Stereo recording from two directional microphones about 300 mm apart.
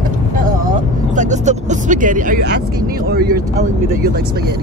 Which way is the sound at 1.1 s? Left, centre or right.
Right.